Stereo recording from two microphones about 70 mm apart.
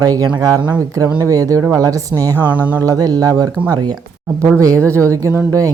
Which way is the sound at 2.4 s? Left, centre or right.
Right.